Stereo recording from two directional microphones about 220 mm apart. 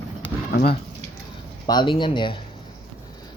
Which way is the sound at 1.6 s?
20° left (ahead or behind).